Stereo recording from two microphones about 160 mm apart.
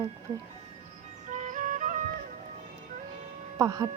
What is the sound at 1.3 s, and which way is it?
Music, 50° right (ahead or behind).